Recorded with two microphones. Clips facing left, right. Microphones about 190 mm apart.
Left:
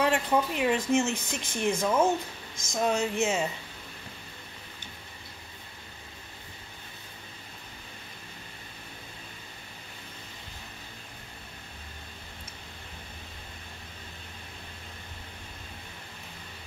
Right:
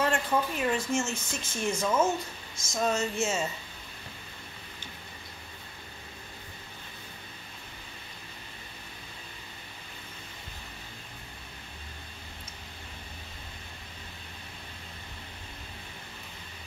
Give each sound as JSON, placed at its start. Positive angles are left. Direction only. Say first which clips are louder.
{"t": 0.0, "sound": "speech", "louder": "left 2 dB", "side_deg": 15}